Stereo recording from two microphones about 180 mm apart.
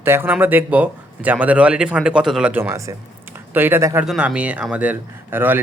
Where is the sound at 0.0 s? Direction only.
10° right (ahead or behind).